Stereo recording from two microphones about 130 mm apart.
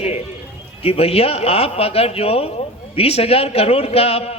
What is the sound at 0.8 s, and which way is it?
Speech, 50° left (ahead or behind).